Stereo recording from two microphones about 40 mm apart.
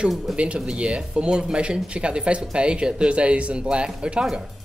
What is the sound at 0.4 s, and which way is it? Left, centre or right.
Speech, right.